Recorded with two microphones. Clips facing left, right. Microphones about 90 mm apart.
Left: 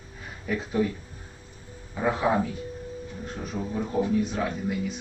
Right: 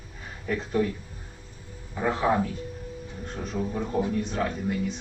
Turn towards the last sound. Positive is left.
turn(degrees=5)  # may be behind; listen again after turning